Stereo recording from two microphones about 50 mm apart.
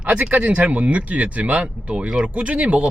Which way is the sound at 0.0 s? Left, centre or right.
Right.